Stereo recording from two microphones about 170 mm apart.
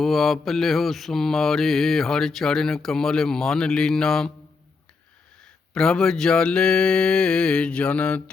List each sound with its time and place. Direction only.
0.0 s mantra: centre (ahead or behind)
5.7 s mantra: 5° left (ahead or behind)